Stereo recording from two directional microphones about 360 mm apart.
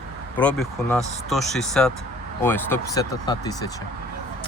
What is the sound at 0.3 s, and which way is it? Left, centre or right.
Speech, centre.